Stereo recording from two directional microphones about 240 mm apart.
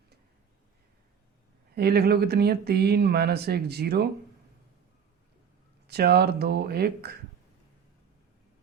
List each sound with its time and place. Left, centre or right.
1.7 s speech: right
5.9 s speech: right